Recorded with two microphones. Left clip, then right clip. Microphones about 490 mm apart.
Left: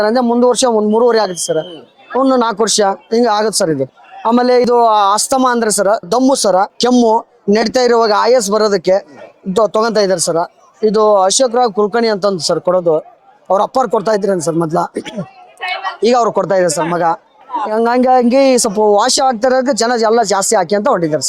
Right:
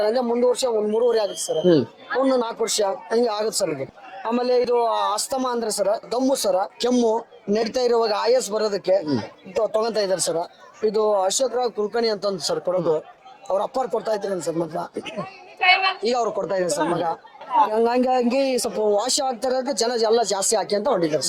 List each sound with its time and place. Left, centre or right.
0.0 s speech: left